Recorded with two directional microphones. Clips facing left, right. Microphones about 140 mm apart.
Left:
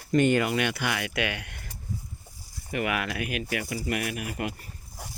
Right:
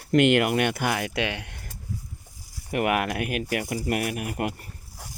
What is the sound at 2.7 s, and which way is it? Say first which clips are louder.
Speech: right 5 dB; 50° right (ahead or behind).